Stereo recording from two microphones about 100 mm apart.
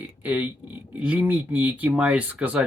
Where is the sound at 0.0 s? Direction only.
15° right (ahead or behind).